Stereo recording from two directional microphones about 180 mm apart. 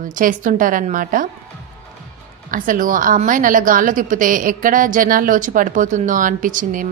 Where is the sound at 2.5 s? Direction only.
50° right (ahead or behind).